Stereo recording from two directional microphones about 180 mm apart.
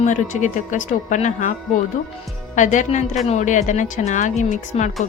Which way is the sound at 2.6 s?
45° left (ahead or behind).